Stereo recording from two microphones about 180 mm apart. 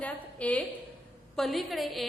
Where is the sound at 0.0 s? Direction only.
5° left (ahead or behind).